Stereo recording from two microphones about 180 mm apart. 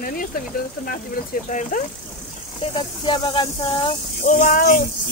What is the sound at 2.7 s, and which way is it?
Speech, 25° left (ahead or behind).